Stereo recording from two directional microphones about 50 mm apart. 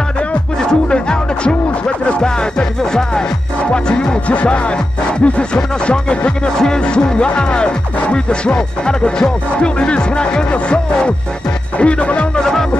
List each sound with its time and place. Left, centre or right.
0.3 s music: centre